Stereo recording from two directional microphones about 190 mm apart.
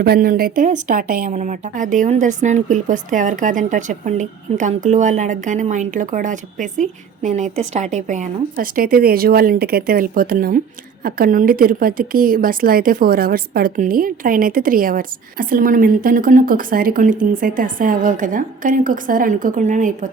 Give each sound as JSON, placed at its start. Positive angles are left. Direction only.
{"t": 0.0, "sound": "a woman's voice", "side_deg": -50}